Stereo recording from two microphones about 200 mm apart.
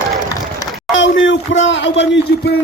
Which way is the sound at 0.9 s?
70° left (ahead or behind).